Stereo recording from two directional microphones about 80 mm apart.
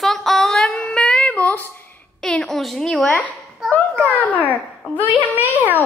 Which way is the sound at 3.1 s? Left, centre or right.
Centre.